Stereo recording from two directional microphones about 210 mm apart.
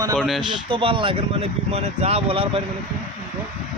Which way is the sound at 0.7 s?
25° right (ahead or behind).